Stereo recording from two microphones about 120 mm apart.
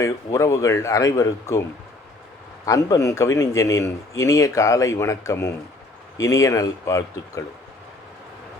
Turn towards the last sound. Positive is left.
turn(degrees=25)  # may be behind; listen again after turning